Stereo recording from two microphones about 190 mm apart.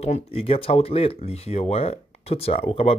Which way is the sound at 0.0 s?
30° left (ahead or behind).